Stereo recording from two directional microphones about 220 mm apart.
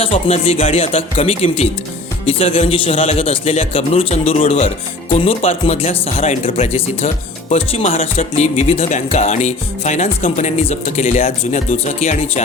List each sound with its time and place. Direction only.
0.0 s a man's voice: 25° left (ahead or behind)